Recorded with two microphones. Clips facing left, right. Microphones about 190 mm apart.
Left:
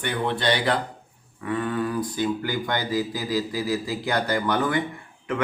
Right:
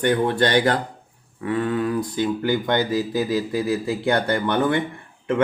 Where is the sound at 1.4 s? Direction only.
25° right (ahead or behind).